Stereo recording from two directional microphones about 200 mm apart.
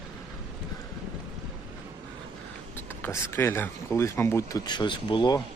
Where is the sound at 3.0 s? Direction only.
10° left (ahead or behind).